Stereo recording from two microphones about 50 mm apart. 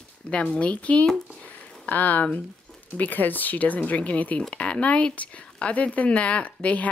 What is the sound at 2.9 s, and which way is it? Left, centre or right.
Speech, left.